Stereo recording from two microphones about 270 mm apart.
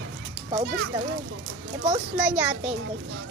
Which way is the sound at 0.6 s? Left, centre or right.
Right.